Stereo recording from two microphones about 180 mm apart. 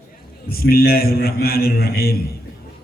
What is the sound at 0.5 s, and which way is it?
A man's voice, 60° left (ahead or behind).